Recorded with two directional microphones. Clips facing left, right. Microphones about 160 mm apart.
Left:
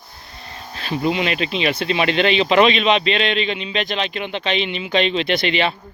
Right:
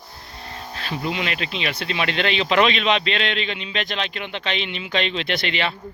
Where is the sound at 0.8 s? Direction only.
20° left (ahead or behind).